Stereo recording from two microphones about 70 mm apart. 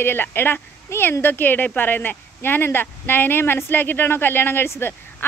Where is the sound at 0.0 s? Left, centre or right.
Left.